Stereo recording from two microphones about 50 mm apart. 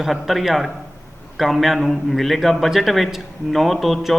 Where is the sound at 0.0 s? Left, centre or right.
Centre.